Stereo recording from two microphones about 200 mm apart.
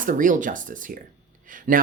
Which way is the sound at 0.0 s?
40° right (ahead or behind).